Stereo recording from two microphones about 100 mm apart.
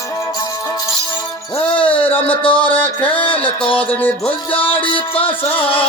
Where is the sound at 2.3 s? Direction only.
60° left (ahead or behind).